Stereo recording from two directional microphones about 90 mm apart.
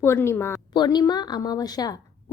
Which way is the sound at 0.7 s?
50° left (ahead or behind).